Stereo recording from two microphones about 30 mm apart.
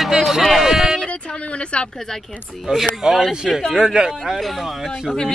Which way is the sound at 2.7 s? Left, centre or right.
Right.